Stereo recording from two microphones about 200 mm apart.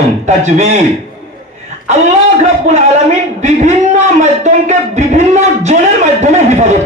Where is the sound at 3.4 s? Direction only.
35° right (ahead or behind).